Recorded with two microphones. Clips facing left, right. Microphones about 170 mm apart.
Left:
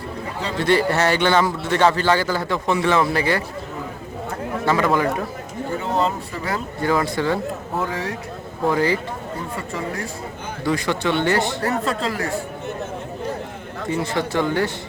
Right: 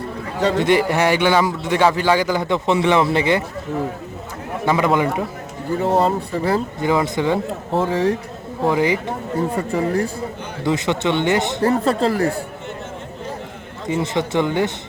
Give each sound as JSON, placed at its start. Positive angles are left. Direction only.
{"t": 0.6, "sound": "a man's voice", "side_deg": -15}
{"t": 4.6, "sound": "a man's voice", "side_deg": -15}
{"t": 5.8, "sound": "speech", "side_deg": -35}
{"t": 6.8, "sound": "speech", "side_deg": -20}
{"t": 8.6, "sound": "a man's voice", "side_deg": -15}
{"t": 9.6, "sound": "speech", "side_deg": -35}
{"t": 10.6, "sound": "speech", "side_deg": -20}
{"t": 11.7, "sound": "speech", "side_deg": -35}
{"t": 13.8, "sound": "speech", "side_deg": -20}